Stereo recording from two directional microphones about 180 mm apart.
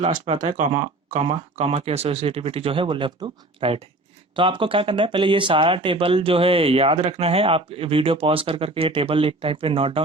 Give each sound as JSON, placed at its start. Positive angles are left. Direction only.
{"t": 0.3, "sound": "speech", "side_deg": -40}